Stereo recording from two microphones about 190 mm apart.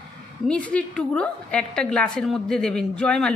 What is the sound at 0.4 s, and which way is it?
A woman's voice, 5° left (ahead or behind).